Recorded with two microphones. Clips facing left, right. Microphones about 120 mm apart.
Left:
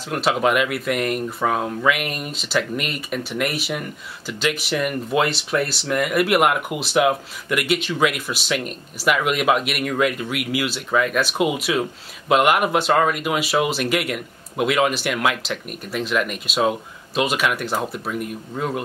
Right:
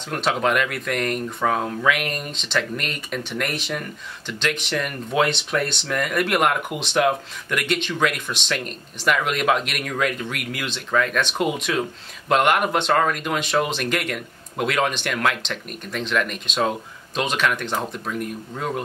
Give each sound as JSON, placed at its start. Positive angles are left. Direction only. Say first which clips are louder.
{"t": 0.1, "sound": "speech", "louder": "left 2 dB", "side_deg": 5}